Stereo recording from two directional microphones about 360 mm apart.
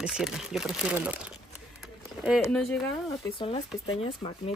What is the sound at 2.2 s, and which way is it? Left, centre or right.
Speech, centre.